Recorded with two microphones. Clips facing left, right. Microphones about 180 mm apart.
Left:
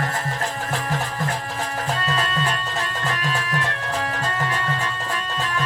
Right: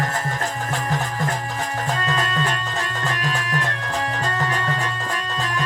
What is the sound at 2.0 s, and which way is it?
Music, 40° right (ahead or behind).